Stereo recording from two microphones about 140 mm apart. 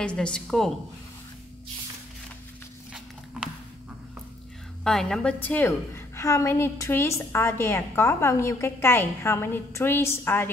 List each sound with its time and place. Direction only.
0.0 s a woman's voice: 5° left (ahead or behind)
4.8 s a woman's voice: 5° left (ahead or behind)